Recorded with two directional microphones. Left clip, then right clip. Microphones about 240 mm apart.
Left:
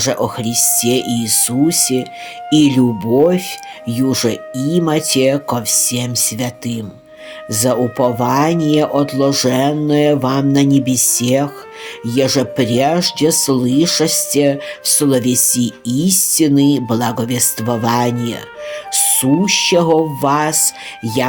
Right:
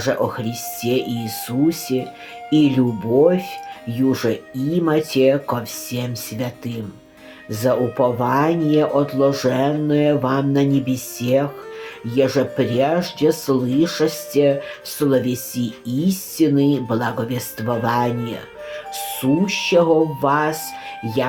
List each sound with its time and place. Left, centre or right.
0.0 s speech: left